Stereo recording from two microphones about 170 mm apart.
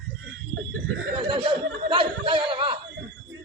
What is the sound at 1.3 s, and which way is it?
Chuckle, 30° right (ahead or behind).